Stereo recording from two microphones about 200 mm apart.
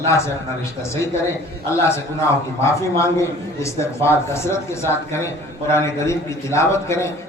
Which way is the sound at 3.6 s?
15° left (ahead or behind).